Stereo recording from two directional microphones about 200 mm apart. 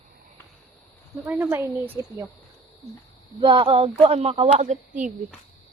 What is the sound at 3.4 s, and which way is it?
Speech, 25° right (ahead or behind).